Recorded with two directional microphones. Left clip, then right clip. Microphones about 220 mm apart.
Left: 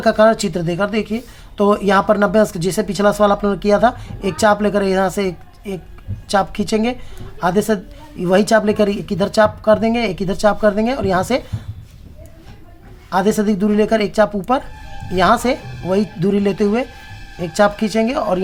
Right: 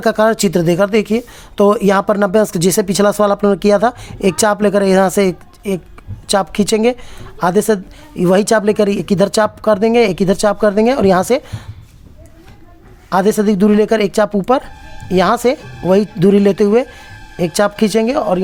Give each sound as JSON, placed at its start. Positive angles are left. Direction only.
{"t": 0.0, "sound": "a woman's voice", "side_deg": -50}
{"t": 13.1, "sound": "a woman's voice", "side_deg": -45}